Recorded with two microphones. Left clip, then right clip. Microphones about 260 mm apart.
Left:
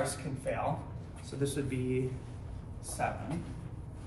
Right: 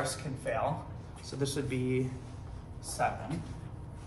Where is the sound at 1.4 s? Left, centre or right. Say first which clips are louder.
Right 1 dB; right.